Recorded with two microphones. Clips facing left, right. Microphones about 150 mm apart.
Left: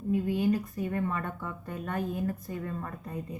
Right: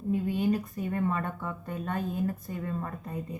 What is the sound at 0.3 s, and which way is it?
Speech, 25° right (ahead or behind).